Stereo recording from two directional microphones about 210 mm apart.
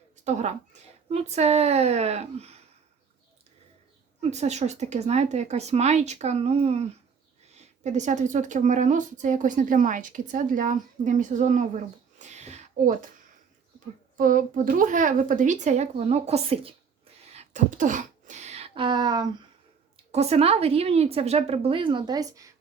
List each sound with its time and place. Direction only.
0.3 s a woman's voice: 35° right (ahead or behind)
4.2 s a woman's voice: 30° right (ahead or behind)
12.2 s a sound: 30° right (ahead or behind)
14.2 s a woman's voice: 40° right (ahead or behind)
17.3 s a sound: 35° right (ahead or behind); by 19.3 s 20° right (ahead or behind)
20.1 s speech: 30° right (ahead or behind)